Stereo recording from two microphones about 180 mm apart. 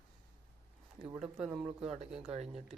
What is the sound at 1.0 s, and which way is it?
Speech, 5° right (ahead or behind).